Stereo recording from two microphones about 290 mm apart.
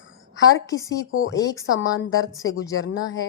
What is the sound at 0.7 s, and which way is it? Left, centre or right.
Speech, centre.